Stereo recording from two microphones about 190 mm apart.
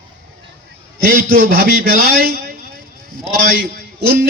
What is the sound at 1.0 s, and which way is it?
A man's voice, 50° right (ahead or behind).